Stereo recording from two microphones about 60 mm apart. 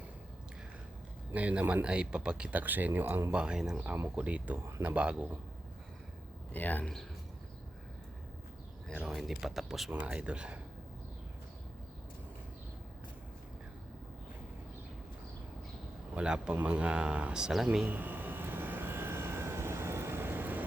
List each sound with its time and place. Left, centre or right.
1.3 s speech: right
2.6 s speech: right
3.3 s speech: centre
6.5 s a man's voice: left
9.0 s speech: centre
9.9 s speech: centre
16.1 s speech: centre
17.8 s vehicle: right